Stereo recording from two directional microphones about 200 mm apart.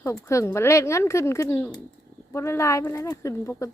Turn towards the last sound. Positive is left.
turn(degrees=15)  # may be behind; listen again after turning